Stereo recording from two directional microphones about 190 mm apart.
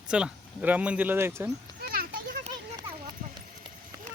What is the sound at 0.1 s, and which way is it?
Speech, 5° right (ahead or behind).